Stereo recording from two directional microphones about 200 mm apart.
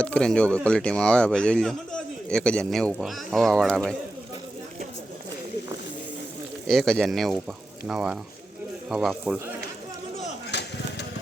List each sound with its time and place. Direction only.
0.0 s speech: 5° left (ahead or behind)
6.7 s speech: 5° left (ahead or behind)
10.5 s a sound: 55° left (ahead or behind)